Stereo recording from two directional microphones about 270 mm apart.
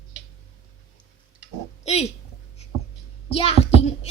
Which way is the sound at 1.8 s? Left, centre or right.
Left.